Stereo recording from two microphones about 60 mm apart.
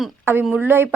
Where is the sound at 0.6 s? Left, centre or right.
Right.